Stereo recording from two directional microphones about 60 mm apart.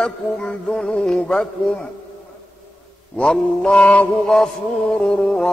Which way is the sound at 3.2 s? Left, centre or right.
Centre.